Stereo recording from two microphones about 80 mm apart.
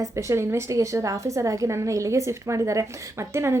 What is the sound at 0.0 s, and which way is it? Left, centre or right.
Speech, right.